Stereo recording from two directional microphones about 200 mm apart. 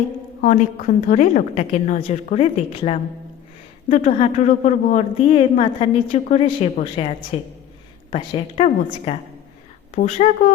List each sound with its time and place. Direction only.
0.4 s a woman's voice: 40° left (ahead or behind)